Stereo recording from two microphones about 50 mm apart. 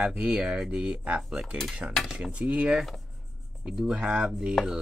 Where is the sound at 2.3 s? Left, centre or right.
Right.